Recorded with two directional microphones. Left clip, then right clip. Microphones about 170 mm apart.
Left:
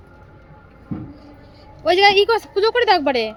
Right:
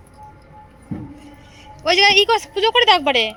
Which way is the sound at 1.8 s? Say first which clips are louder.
Even; 20° left (ahead or behind).